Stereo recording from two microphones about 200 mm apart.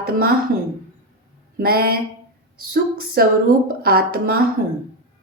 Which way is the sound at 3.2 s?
50° right (ahead or behind).